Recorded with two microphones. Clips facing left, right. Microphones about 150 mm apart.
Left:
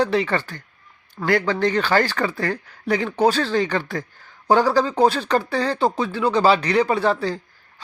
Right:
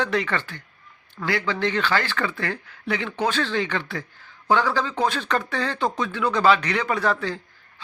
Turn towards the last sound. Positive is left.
turn(degrees=30)  # may be behind; listen again after turning